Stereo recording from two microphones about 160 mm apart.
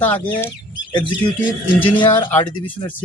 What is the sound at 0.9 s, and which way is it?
Speech, 30° left (ahead or behind).